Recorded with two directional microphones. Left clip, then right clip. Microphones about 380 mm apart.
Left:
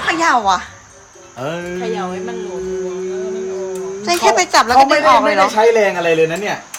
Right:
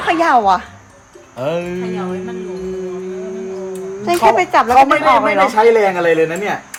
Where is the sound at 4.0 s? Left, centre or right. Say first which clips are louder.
Right 1 dB; centre.